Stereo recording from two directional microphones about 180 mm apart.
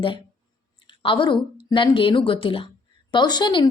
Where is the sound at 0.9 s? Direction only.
25° left (ahead or behind).